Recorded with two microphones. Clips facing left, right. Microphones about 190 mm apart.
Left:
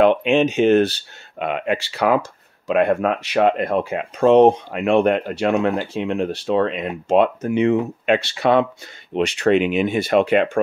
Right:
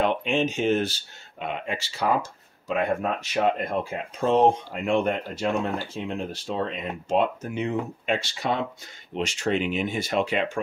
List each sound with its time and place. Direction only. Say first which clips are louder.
0.0 s speech: left 8 dB; 70° left (ahead or behind)